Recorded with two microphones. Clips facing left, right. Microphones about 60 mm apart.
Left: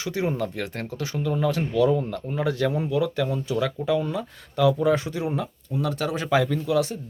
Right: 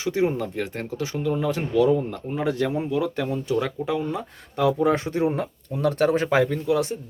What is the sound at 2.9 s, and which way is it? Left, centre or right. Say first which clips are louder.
Speech: left 1 dB; right.